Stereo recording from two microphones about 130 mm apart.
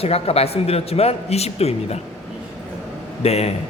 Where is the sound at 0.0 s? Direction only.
50° left (ahead or behind).